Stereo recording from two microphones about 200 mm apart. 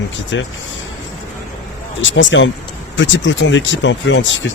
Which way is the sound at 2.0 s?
70° left (ahead or behind).